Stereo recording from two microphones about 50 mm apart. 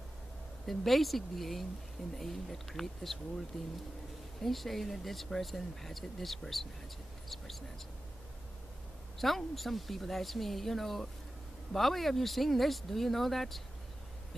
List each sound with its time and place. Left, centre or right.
0.7 s speech: centre
9.2 s speech: centre